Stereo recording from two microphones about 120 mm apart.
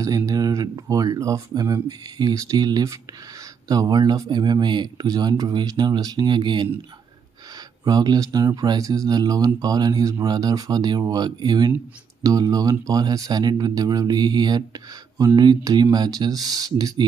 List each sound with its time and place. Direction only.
0.0 s speech: 30° right (ahead or behind)
7.8 s speech: 35° right (ahead or behind)